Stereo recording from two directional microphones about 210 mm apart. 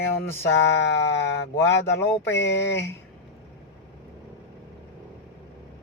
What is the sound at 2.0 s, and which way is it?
Speech, 10° left (ahead or behind).